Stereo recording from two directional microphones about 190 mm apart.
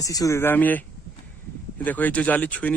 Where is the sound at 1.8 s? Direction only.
10° left (ahead or behind).